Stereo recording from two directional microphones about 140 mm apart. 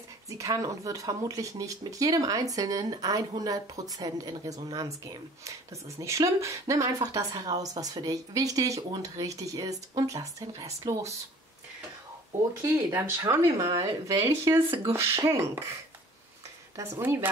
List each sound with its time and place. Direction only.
0.3 s speech: 25° right (ahead or behind)
12.6 s speech: 20° right (ahead or behind)
16.7 s speech: 20° right (ahead or behind)